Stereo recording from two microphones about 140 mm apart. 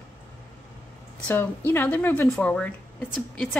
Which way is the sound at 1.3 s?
15° left (ahead or behind).